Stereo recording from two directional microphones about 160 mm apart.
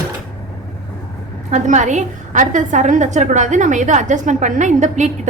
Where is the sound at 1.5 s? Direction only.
50° right (ahead or behind).